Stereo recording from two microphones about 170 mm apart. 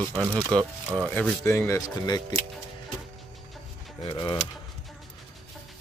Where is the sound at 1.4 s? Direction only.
15° left (ahead or behind).